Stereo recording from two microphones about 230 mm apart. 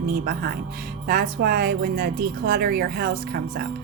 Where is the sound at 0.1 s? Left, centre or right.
Right.